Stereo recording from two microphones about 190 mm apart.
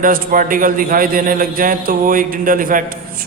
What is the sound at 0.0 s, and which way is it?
Mantra, 45° right (ahead or behind).